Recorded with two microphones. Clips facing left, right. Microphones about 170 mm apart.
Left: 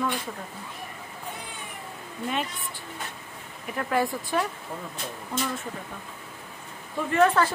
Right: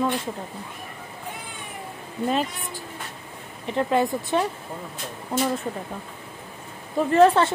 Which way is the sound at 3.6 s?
25° right (ahead or behind).